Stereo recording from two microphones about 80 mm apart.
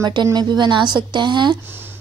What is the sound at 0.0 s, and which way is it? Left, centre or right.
Speech, right.